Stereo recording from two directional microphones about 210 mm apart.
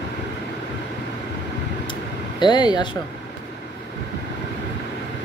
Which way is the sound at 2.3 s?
20° left (ahead or behind).